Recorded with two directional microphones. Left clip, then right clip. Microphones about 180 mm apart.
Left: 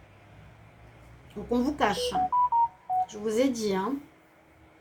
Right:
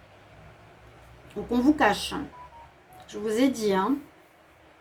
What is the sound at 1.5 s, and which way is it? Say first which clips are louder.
Speech: right 4 dB; 45° right (ahead or behind).